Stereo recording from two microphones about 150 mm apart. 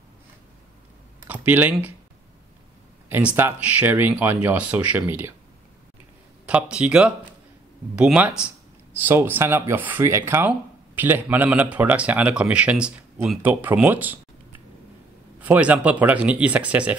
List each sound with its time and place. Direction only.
1.2 s speech: 10° right (ahead or behind)
3.1 s speech: 10° right (ahead or behind)
6.4 s speech: 10° right (ahead or behind)
15.4 s speech: 10° right (ahead or behind)